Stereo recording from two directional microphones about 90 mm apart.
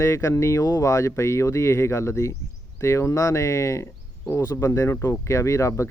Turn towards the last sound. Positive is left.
turn(degrees=35)  # may be behind; listen again after turning